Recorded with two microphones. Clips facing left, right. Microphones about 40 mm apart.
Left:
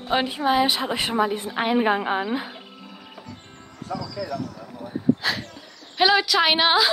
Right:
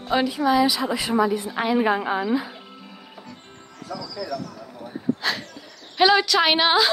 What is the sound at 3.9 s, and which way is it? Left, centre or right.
Speech, left.